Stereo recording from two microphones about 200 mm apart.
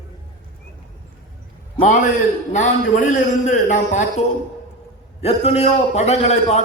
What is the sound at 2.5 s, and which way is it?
A man's voice, 40° left (ahead or behind).